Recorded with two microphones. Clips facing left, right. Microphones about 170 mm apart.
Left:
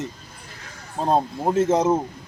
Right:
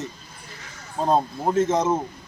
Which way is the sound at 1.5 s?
30° left (ahead or behind).